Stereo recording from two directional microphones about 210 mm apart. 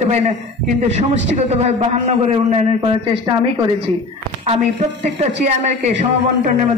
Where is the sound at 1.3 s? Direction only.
30° right (ahead or behind).